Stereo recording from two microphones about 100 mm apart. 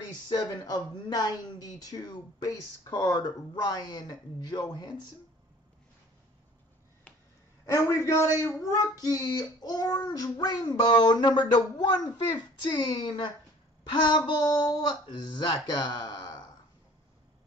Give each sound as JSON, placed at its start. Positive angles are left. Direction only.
{"t": 0.0, "sound": "speech", "side_deg": 40}
{"t": 7.6, "sound": "a man's voice", "side_deg": 30}